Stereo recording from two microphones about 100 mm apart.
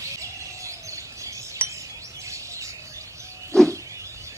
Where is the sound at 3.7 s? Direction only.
30° right (ahead or behind).